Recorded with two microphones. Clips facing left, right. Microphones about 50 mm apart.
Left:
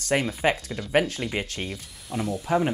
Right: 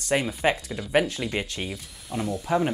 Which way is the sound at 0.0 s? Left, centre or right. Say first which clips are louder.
Even; left.